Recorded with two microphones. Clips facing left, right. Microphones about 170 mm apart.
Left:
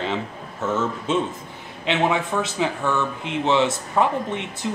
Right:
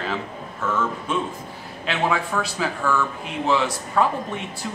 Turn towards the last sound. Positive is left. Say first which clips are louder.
# left 2 dB
turn(degrees=20)  # may be behind; listen again after turning